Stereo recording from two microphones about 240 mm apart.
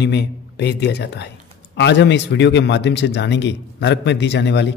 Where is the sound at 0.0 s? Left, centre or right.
Left.